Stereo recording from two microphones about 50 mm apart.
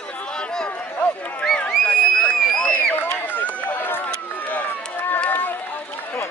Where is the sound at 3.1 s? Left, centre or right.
Left.